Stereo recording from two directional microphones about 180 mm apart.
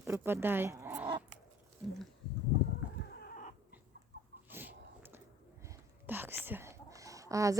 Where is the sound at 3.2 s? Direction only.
50° left (ahead or behind).